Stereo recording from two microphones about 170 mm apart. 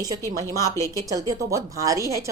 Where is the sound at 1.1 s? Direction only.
20° right (ahead or behind).